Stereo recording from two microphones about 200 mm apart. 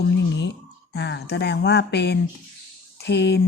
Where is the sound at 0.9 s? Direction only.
60° left (ahead or behind).